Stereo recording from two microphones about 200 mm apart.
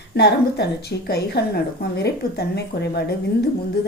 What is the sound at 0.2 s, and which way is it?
A woman's voice, 55° left (ahead or behind).